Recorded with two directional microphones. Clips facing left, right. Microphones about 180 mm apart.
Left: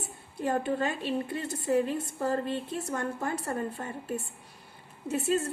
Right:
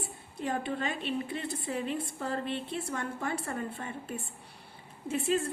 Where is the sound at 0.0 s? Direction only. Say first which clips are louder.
Left 3 dB; 45° left (ahead or behind).